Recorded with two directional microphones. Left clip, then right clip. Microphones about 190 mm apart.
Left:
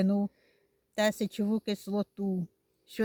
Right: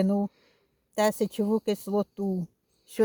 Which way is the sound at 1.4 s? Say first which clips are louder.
Right 6 dB; 20° right (ahead or behind).